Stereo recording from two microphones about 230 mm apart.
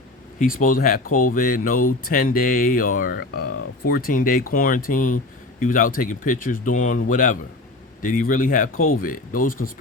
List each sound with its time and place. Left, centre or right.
0.3 s speech: left
8.7 s speech: left
9.0 s speech: left